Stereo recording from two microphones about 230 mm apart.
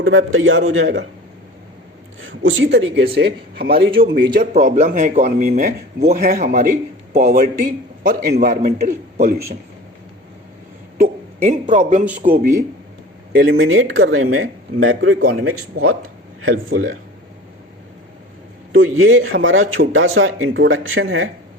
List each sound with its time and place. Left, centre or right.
0.0 s speech: right
2.2 s speech: right
10.9 s a man's voice: right
13.4 s speech: right
18.7 s speech: right